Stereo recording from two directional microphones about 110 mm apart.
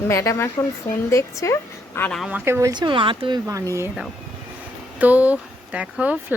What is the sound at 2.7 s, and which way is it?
Speech, 45° right (ahead or behind).